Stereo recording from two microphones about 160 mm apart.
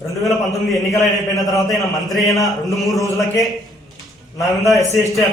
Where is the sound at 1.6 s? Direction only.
Centre (ahead or behind).